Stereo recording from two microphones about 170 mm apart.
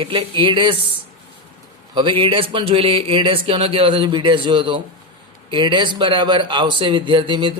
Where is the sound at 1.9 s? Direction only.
30° right (ahead or behind).